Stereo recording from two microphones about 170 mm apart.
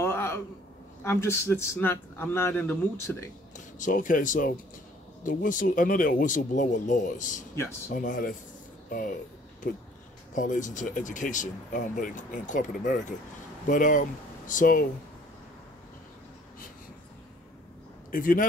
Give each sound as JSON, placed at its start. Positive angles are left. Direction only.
{"t": 0.0, "sound": "a sound", "side_deg": 15}
{"t": 1.0, "sound": "a man's voice", "side_deg": 15}
{"t": 3.5, "sound": "speech", "side_deg": 50}
{"t": 9.6, "sound": "speech", "side_deg": 55}
{"t": 18.1, "sound": "speech", "side_deg": 55}